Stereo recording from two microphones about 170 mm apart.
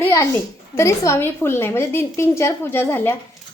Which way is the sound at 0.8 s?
15° left (ahead or behind).